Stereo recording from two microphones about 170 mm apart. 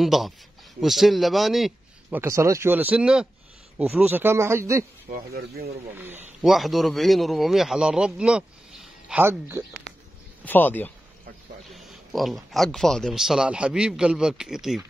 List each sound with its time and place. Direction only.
0.0 s speech: centre (ahead or behind)
2.0 s speech: 15° right (ahead or behind)
5.1 s speech: 65° right (ahead or behind)
5.9 s speech: 10° right (ahead or behind)
6.4 s speech: centre (ahead or behind)
10.4 s speech: 10° left (ahead or behind)
11.7 s speech: centre (ahead or behind)